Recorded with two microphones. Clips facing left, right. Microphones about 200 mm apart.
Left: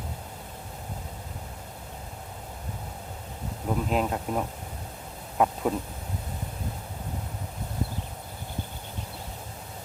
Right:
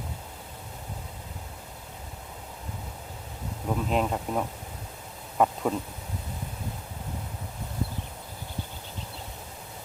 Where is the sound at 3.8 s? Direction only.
Centre (ahead or behind).